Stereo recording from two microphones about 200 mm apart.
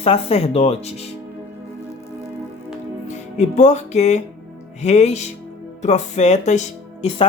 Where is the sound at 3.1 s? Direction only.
35° left (ahead or behind).